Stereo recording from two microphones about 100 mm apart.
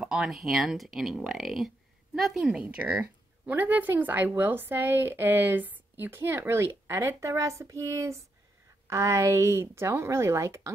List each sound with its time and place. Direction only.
0.0 s speech: 5° right (ahead or behind)
2.6 s speech: 15° right (ahead or behind)